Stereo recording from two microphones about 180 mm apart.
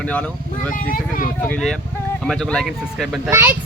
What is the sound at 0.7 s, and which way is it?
Speech, 50° left (ahead or behind).